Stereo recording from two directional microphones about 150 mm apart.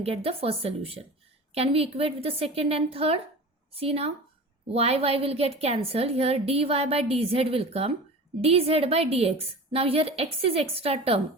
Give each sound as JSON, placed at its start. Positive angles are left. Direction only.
{"t": 0.0, "sound": "a woman's voice", "side_deg": -40}